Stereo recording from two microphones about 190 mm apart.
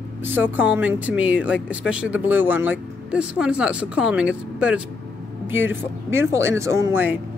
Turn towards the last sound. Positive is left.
turn(degrees=-10)  # may be behind; listen again after turning